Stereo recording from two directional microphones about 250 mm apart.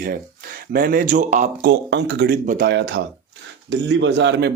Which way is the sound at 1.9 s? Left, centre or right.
Right.